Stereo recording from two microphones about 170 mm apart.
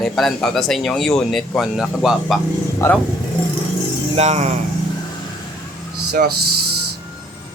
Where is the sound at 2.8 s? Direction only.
15° left (ahead or behind).